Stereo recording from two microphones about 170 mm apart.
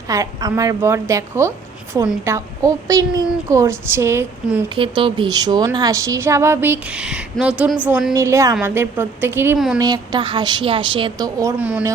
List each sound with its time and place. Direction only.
0.1 s a woman's voice: 20° right (ahead or behind)
4.7 s a woman's voice: 30° right (ahead or behind); by 9.6 s 15° right (ahead or behind)
9.7 s a woman's voice: 25° right (ahead or behind)